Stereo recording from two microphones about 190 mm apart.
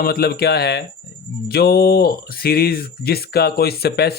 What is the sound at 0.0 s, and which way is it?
Speech, 55° left (ahead or behind).